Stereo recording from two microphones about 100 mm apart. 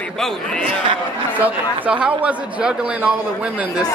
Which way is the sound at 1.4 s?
15° right (ahead or behind).